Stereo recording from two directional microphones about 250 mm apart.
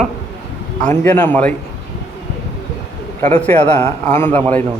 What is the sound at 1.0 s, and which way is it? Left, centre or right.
Speech, centre.